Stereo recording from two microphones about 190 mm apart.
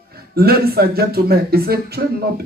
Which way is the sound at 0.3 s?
55° right (ahead or behind).